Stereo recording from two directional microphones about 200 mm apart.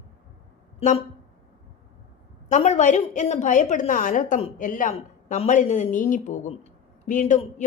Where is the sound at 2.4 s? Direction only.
35° left (ahead or behind).